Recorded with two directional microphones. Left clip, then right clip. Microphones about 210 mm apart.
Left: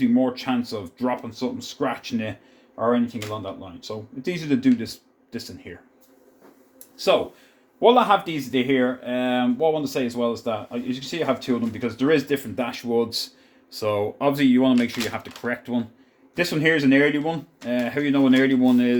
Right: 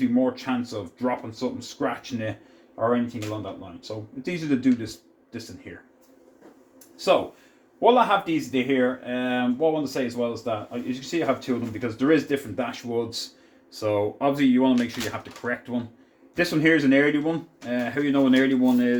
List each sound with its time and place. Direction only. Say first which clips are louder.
0.2 s speech: left 1 dB; 45° left (ahead or behind)
3.8 s speech: left 2 dB; 45° left (ahead or behind)
7.8 s speech: left 2 dB; 45° left (ahead or behind)